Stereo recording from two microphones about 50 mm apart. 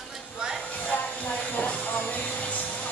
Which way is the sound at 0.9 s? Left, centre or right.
Left.